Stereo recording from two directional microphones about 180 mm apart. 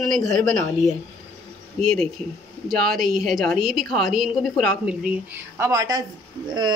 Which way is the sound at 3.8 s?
55° right (ahead or behind).